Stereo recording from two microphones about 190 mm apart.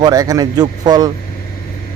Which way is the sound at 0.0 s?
20° right (ahead or behind).